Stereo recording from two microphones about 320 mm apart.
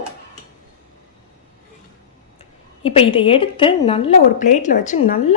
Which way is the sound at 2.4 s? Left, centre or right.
Centre.